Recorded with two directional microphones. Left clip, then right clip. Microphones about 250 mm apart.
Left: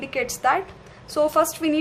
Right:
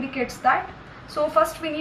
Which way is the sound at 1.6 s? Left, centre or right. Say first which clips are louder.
Left 6 dB; left.